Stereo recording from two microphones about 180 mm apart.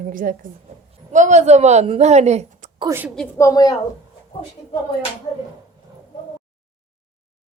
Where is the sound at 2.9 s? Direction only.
10° right (ahead or behind).